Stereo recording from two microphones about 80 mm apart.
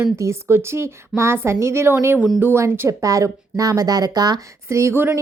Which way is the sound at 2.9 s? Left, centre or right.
Right.